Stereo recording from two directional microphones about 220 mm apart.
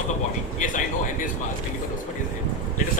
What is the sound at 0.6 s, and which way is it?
Speech, 35° left (ahead or behind).